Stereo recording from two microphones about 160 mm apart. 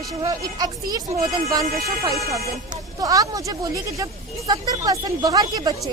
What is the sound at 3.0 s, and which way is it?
A woman's voice, 20° right (ahead or behind).